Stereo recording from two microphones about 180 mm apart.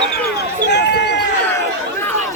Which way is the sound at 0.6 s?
70° left (ahead or behind).